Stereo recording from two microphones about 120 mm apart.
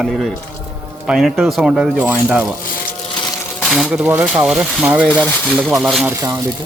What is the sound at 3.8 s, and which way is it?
Speech, 5° right (ahead or behind).